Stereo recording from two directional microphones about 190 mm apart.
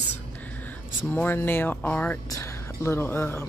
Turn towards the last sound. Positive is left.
turn(degrees=10)  # may be behind; listen again after turning